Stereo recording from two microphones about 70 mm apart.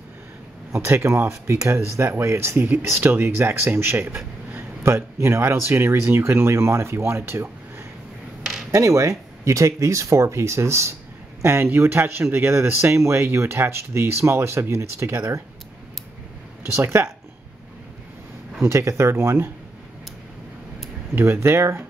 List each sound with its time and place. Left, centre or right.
0.7 s speech: right
8.7 s speech: right
16.7 s speech: right
18.6 s speech: right
21.1 s speech: right